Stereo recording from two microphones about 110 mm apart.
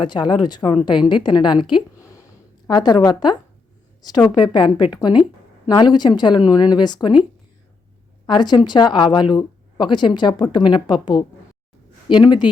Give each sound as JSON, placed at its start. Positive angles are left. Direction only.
{"t": 0.0, "sound": "a woman's voice", "side_deg": 45}
{"t": 2.0, "sound": "a sound", "side_deg": 30}
{"t": 2.6, "sound": "speech", "side_deg": 40}
{"t": 4.4, "sound": "a woman's voice", "side_deg": 40}
{"t": 8.3, "sound": "a woman's voice", "side_deg": 40}